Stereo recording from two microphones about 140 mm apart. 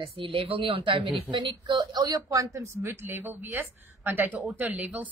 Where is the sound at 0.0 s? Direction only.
40° right (ahead or behind).